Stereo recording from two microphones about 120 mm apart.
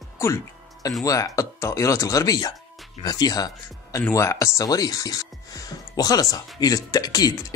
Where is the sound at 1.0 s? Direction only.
30° left (ahead or behind).